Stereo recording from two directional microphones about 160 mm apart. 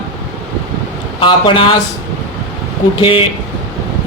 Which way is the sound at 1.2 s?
30° left (ahead or behind).